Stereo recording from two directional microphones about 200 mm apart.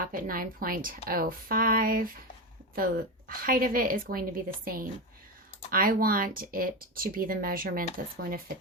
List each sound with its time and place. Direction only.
0.0 s a woman's voice: 45° right (ahead or behind)